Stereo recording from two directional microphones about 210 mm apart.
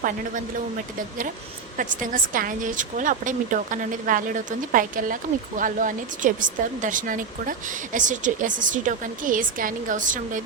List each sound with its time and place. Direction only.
1.7 s speech: 40° right (ahead or behind)